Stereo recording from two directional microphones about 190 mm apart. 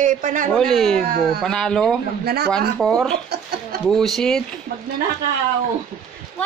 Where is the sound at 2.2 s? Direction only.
55° right (ahead or behind).